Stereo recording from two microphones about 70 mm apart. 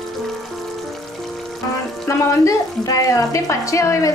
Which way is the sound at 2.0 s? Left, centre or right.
Left.